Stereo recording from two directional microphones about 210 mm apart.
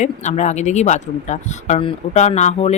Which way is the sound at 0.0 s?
35° left (ahead or behind).